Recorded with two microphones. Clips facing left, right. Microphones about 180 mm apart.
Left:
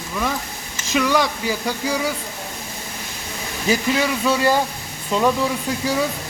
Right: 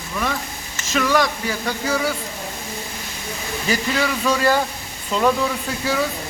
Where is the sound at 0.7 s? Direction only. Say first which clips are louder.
Even; 15° left (ahead or behind).